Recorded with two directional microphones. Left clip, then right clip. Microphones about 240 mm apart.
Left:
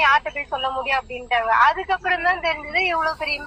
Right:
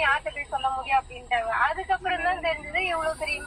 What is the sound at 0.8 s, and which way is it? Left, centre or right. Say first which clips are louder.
A man's voice: left 2 dB; left.